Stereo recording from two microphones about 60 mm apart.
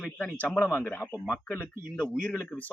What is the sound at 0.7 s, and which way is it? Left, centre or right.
Speech, left.